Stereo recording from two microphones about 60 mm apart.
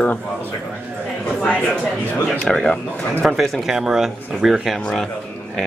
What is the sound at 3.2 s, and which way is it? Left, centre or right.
Speech, centre.